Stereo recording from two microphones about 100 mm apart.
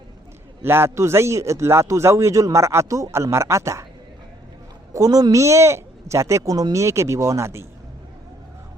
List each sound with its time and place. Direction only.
0.6 s a man's voice: 25° right (ahead or behind)
4.9 s a man's voice: 40° right (ahead or behind)